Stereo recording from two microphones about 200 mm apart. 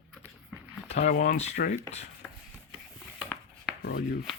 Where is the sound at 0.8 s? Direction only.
40° left (ahead or behind).